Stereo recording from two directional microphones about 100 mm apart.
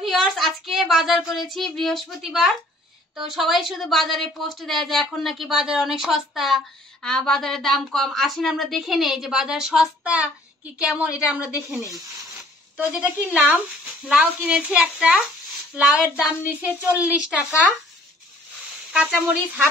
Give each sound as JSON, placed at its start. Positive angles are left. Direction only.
{"t": 0.0, "sound": "a woman's voice", "side_deg": 0}
{"t": 11.8, "sound": "speech", "side_deg": -40}
{"t": 12.9, "sound": "a woman's voice", "side_deg": -15}
{"t": 18.9, "sound": "a woman's voice", "side_deg": -10}